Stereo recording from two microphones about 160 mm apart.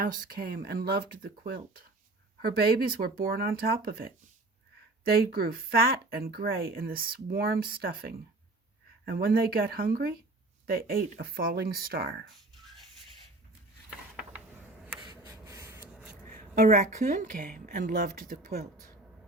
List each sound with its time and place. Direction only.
0.0 s speech: 60° right (ahead or behind)
15.0 s writing: 25° right (ahead or behind)
16.3 s a woman's voice: 55° right (ahead or behind)